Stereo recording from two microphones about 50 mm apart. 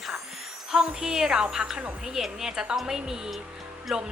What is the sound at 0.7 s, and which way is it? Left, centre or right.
A woman's voice, centre.